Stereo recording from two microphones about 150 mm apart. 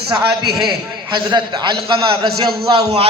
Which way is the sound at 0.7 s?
30° right (ahead or behind).